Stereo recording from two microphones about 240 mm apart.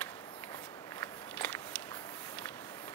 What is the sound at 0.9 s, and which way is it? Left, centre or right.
Walk, centre.